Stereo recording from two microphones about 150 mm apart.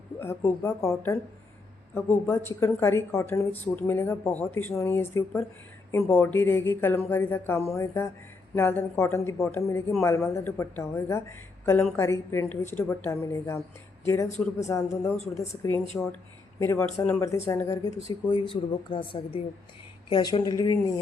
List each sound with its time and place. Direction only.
0.2 s speech: 15° left (ahead or behind)
15.9 s speech: 10° left (ahead or behind)